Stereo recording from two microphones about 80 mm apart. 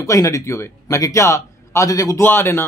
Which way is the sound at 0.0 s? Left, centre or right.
Left.